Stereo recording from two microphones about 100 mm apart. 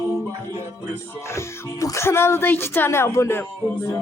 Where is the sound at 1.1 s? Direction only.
25° left (ahead or behind).